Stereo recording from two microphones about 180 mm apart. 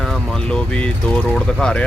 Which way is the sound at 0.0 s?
5° left (ahead or behind).